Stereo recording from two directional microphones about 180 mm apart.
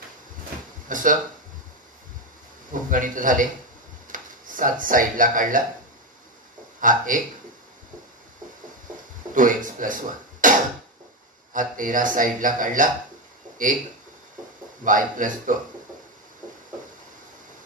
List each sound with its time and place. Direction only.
0.8 s speech: 45° right (ahead or behind)
2.7 s a man's voice: 50° right (ahead or behind)
6.8 s speech: 50° right (ahead or behind)
9.3 s speech: 45° right (ahead or behind)
11.5 s a man's voice: 50° right (ahead or behind)
14.9 s a man's voice: 45° right (ahead or behind)